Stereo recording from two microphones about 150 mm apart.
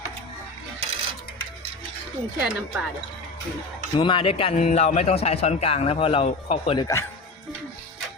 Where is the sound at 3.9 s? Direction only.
35° left (ahead or behind).